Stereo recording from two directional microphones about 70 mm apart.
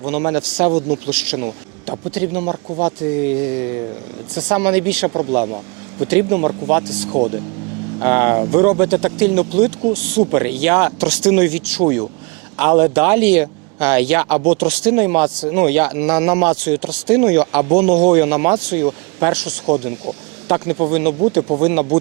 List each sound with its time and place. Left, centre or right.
0.0 s speech: right